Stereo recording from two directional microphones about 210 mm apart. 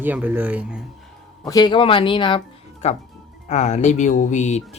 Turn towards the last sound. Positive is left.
turn(degrees=35)  # may be behind; listen again after turning